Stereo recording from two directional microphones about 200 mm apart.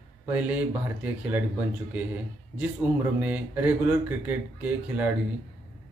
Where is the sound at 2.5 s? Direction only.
5° right (ahead or behind).